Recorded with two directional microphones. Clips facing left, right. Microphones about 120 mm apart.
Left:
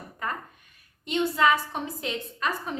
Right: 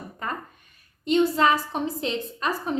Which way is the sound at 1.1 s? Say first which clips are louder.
Right 3 dB; 35° right (ahead or behind).